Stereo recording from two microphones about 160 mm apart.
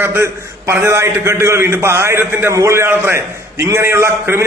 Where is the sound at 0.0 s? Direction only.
15° right (ahead or behind).